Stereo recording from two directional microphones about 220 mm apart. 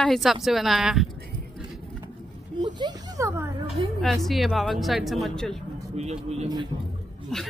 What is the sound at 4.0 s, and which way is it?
Speech, centre (ahead or behind).